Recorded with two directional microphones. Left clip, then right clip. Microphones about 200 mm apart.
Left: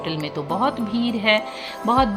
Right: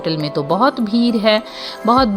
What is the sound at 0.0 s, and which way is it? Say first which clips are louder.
A woman's voice: right 7 dB; 30° right (ahead or behind).